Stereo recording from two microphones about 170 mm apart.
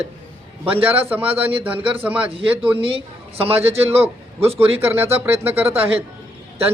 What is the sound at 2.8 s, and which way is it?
A woman's voice, 30° right (ahead or behind).